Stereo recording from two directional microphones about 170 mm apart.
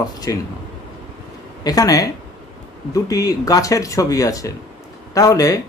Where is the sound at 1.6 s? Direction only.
20° left (ahead or behind).